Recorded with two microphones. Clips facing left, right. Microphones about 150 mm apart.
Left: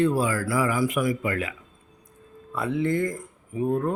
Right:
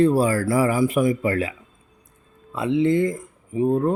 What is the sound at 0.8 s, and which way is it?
Speech, 25° right (ahead or behind).